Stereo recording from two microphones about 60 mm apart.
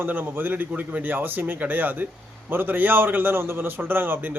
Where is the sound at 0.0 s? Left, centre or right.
Right.